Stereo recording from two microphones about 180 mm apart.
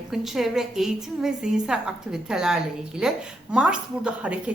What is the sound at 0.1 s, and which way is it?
A woman's voice, centre (ahead or behind).